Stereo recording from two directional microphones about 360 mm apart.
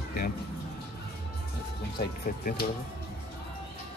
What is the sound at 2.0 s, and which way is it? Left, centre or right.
Speech, left.